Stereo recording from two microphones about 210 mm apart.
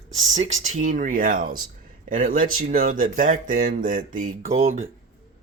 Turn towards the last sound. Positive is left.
turn(degrees=-35)  # may be behind; listen again after turning